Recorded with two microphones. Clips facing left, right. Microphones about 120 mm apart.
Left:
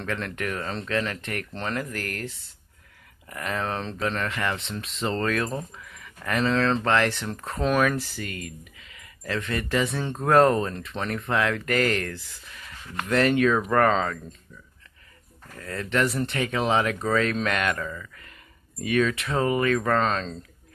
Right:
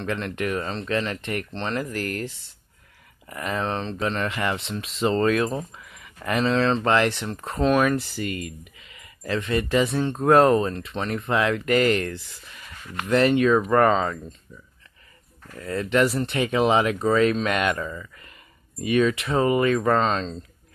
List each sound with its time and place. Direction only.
0.0 s speech: 10° right (ahead or behind)
15.6 s speech: 10° right (ahead or behind)
17.7 s speech: 15° right (ahead or behind)